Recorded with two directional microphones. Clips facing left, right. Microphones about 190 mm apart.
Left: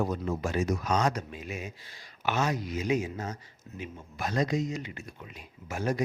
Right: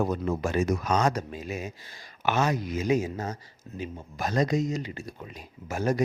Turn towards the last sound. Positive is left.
turn(degrees=-45)  # may be behind; listen again after turning